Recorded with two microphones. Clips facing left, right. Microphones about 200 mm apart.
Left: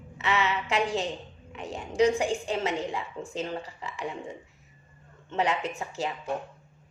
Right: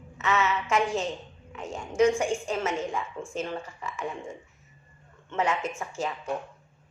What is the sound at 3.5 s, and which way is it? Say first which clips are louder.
Speech: even; 35° left (ahead or behind).